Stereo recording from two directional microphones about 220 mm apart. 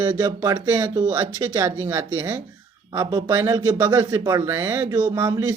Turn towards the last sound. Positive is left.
turn(degrees=-20)  # may be behind; listen again after turning